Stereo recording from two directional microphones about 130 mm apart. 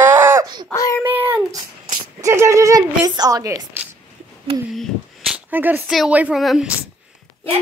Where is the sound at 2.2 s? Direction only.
25° right (ahead or behind).